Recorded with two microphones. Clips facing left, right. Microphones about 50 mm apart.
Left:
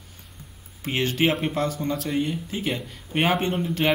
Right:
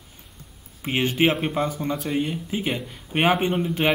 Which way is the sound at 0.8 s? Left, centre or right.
Centre.